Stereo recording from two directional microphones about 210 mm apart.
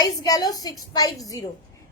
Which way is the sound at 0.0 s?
15° left (ahead or behind).